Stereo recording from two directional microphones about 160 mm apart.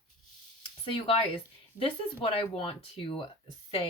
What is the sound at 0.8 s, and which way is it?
Speech, 35° left (ahead or behind).